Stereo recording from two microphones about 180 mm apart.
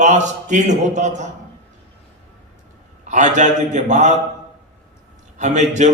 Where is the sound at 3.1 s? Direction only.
40° right (ahead or behind).